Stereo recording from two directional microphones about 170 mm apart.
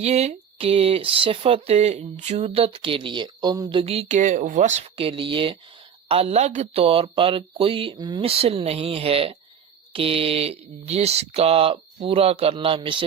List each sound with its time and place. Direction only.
0.0 s speech: 40° right (ahead or behind)